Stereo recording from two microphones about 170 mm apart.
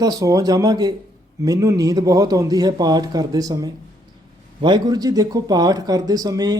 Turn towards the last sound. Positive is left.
turn(degrees=-20)  # may be behind; listen again after turning